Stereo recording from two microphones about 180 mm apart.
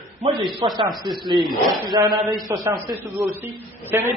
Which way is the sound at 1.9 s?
25° right (ahead or behind).